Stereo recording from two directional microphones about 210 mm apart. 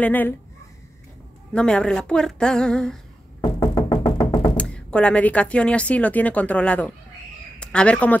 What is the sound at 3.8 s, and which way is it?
Music, 20° left (ahead or behind).